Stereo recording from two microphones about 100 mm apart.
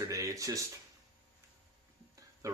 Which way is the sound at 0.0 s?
35° right (ahead or behind).